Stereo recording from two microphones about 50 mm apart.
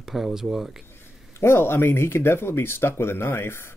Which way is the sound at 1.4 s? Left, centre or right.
Left.